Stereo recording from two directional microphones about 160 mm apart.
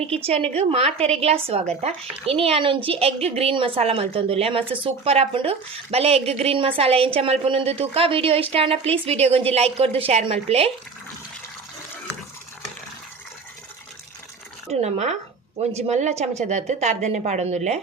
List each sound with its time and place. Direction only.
0.3 s a woman's voice: 40° right (ahead or behind)
14.7 s speech: 40° right (ahead or behind)